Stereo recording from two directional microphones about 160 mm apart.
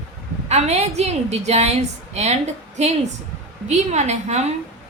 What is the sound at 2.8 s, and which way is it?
A woman's voice, 45° right (ahead or behind).